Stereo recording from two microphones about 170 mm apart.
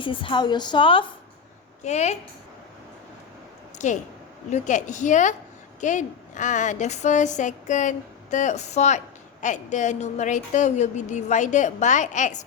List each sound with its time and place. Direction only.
0.0 s a woman's voice: 30° left (ahead or behind)
1.8 s a woman's voice: 40° left (ahead or behind)
3.8 s a woman's voice: 45° left (ahead or behind)